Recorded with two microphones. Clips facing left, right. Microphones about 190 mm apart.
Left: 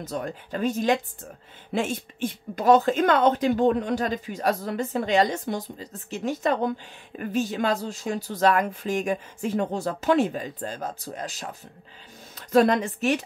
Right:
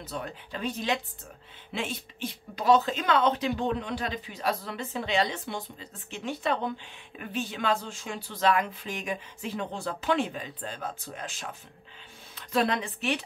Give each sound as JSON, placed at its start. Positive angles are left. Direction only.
{"t": 0.0, "sound": "speech", "side_deg": 45}